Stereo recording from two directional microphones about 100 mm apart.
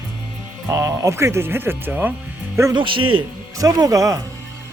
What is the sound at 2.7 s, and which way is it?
Speech, 55° right (ahead or behind).